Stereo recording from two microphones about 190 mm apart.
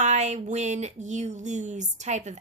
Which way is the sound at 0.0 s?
35° right (ahead or behind).